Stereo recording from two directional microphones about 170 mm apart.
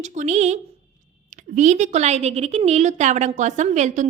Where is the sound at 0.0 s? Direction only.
45° right (ahead or behind).